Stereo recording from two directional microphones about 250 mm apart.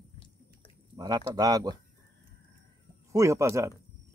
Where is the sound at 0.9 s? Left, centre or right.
Centre.